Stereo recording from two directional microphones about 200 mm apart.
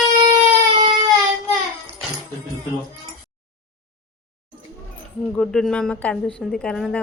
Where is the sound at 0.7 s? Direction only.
20° right (ahead or behind).